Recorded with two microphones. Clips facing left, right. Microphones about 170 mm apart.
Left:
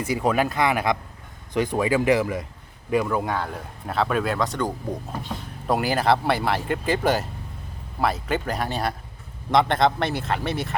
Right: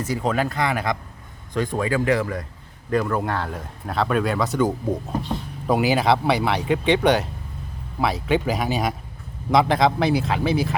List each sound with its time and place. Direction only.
0.0 s speech: 10° left (ahead or behind)